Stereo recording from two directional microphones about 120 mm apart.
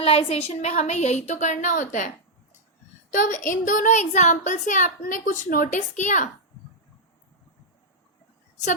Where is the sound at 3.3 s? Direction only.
90° left.